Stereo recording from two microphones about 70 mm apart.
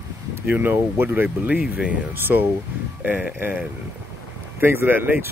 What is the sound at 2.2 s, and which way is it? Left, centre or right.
Speech, right.